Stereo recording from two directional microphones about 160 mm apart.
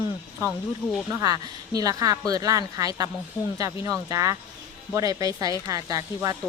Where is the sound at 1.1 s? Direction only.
25° right (ahead or behind).